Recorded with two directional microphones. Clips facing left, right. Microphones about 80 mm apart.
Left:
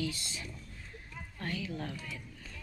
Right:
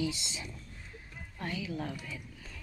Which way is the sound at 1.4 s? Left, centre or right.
Centre.